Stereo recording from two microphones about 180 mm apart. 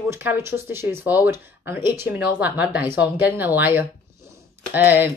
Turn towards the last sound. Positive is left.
turn(degrees=-10)  # may be behind; listen again after turning